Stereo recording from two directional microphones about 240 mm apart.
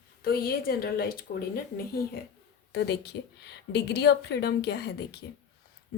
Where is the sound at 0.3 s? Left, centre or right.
Left.